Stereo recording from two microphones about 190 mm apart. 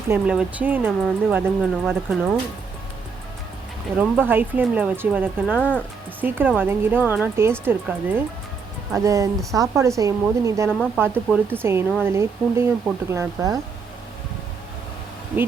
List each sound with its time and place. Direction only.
0.1 s speech: 10° right (ahead or behind)
3.9 s speech: 10° right (ahead or behind)
5.5 s speech: 5° left (ahead or behind)
6.1 s speech: 10° right (ahead or behind)